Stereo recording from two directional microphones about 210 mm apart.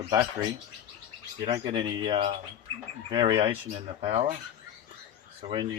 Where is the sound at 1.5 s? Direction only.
20° right (ahead or behind).